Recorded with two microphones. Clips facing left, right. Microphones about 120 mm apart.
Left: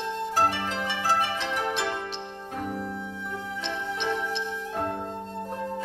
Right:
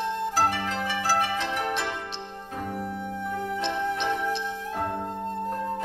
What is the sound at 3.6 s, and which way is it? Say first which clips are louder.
Music: right 3 dB; centre (ahead or behind).